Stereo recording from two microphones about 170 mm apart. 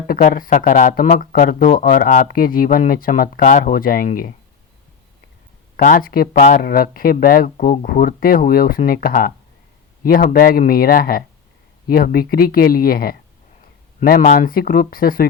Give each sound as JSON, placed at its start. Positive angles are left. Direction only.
{"t": 0.1, "sound": "speech", "side_deg": 55}
{"t": 5.7, "sound": "speech", "side_deg": 55}